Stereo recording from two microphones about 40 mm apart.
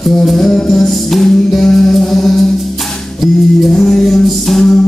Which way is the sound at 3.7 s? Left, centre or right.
Centre.